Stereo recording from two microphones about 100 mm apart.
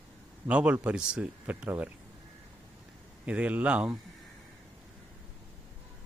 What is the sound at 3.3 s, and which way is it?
Speech, 15° right (ahead or behind).